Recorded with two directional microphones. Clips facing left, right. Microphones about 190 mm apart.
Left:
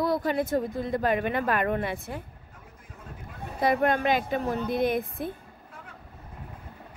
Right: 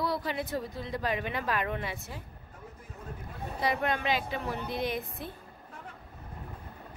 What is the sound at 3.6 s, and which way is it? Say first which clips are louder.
A woman's voice: left 7 dB; 50° left (ahead or behind).